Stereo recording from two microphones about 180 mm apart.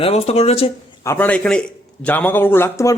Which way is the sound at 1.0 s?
10° left (ahead or behind).